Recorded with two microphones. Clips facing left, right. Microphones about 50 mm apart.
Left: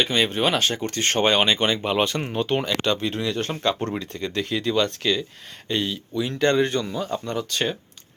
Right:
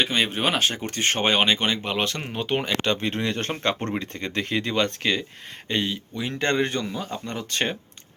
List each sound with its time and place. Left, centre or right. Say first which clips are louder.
0.0 s speech: left 2 dB; centre
2.6 s speech: left 1 dB; right
3.0 s speech: left 1 dB; right
5.6 s speech: even; right
7.3 s speech: left 2 dB; right